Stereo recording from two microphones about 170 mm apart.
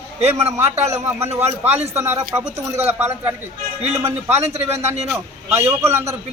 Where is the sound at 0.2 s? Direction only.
40° right (ahead or behind).